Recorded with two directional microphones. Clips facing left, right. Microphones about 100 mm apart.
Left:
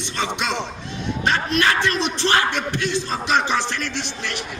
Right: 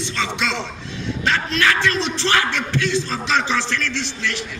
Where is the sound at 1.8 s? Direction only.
20° left (ahead or behind).